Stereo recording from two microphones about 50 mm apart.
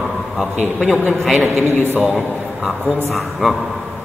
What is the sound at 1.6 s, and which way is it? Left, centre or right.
Speech, right.